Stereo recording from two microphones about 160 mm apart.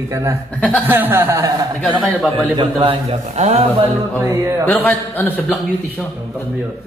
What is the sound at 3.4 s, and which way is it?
Speech, 45° right (ahead or behind).